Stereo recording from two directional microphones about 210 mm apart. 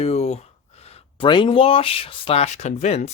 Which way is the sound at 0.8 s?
30° left (ahead or behind).